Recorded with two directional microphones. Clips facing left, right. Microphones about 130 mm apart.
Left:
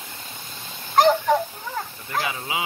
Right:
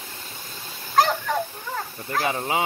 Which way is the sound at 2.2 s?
45° right (ahead or behind).